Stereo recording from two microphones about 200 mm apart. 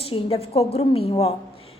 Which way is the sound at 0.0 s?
30° left (ahead or behind).